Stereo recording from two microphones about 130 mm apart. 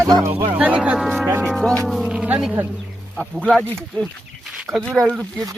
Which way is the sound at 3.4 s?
10° left (ahead or behind).